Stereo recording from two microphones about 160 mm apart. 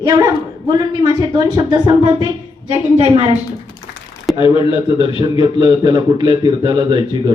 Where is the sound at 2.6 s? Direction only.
40° right (ahead or behind).